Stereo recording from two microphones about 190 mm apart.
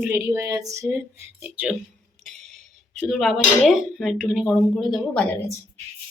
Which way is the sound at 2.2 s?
Centre (ahead or behind).